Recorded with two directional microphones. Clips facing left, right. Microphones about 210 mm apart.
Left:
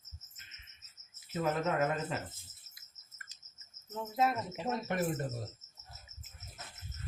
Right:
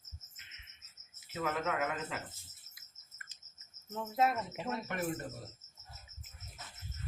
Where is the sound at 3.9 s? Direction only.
Centre (ahead or behind).